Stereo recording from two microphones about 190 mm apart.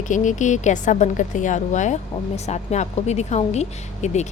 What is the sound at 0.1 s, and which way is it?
A woman's voice, 40° left (ahead or behind).